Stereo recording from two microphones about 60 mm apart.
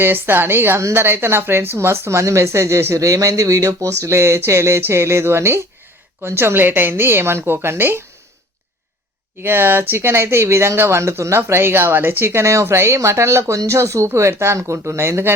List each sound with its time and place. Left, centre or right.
0.0 s speech: right
9.4 s speech: right